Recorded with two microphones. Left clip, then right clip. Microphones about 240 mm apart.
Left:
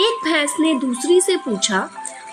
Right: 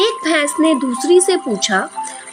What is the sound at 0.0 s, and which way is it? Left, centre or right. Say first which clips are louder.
A woman's voice: right 2 dB; centre.